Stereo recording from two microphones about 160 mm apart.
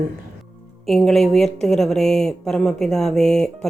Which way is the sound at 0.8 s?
5° left (ahead or behind).